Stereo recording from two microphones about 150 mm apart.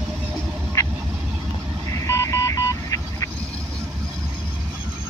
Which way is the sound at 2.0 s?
20° left (ahead or behind).